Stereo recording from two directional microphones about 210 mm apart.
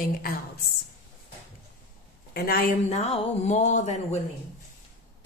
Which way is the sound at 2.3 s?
45° left (ahead or behind).